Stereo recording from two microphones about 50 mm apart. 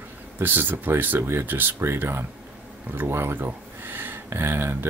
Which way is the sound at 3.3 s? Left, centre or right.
Right.